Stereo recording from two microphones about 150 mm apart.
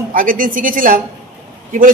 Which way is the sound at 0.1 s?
65° right (ahead or behind).